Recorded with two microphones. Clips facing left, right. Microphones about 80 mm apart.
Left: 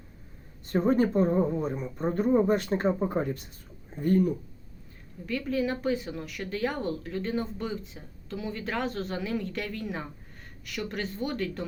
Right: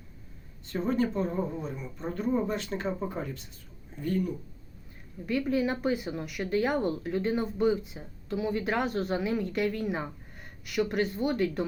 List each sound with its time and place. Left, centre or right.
0.6 s speech: left
1.7 s speech: left
2.0 s speech: left
5.2 s speech: centre